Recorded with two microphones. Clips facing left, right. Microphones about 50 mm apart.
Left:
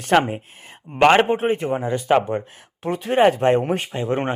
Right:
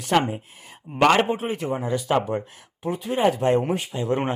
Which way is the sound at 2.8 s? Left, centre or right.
Left.